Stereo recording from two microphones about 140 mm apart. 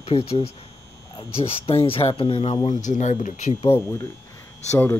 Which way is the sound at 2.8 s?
60° left (ahead or behind).